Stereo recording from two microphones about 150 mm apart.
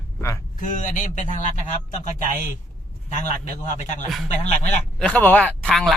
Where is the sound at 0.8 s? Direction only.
55° left (ahead or behind).